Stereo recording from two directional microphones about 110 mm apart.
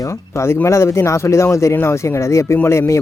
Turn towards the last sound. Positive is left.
turn(degrees=25)  # may be behind; listen again after turning